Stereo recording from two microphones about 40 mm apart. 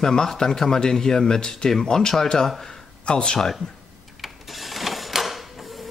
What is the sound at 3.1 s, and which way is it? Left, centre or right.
Speech, left.